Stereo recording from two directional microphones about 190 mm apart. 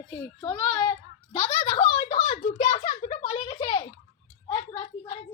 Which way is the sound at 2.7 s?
40° left (ahead or behind).